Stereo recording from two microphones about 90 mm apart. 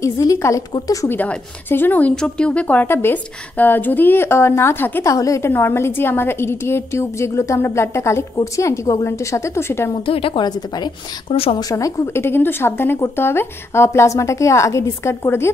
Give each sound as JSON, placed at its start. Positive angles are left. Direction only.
{"t": 0.0, "sound": "a woman's voice", "side_deg": 35}
{"t": 1.0, "sound": "a woman's voice", "side_deg": 20}
{"t": 5.0, "sound": "a woman's voice", "side_deg": 35}
{"t": 5.5, "sound": "a woman's voice", "side_deg": 25}
{"t": 10.0, "sound": "a woman's voice", "side_deg": 85}
{"t": 10.4, "sound": "a woman's voice", "side_deg": 50}
{"t": 11.7, "sound": "a woman's voice", "side_deg": 35}